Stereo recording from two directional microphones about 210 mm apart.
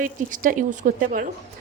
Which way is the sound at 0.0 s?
40° right (ahead or behind).